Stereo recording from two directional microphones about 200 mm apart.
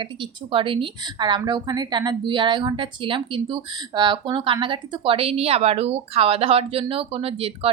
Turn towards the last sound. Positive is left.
turn(degrees=-30)  # may be behind; listen again after turning